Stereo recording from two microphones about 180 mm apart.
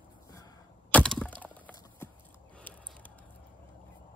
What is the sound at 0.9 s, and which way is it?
Wood, 5° left (ahead or behind).